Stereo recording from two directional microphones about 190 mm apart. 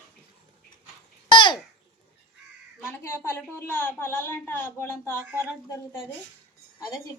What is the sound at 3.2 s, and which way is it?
A woman's voice, 10° left (ahead or behind).